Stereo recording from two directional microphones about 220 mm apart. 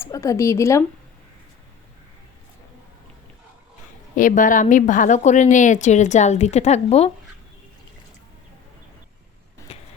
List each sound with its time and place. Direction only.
0.0 s speech: 15° left (ahead or behind)
4.1 s a woman's voice: 35° left (ahead or behind)